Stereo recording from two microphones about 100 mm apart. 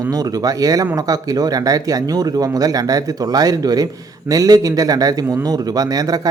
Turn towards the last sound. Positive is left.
turn(degrees=-35)  # may be behind; listen again after turning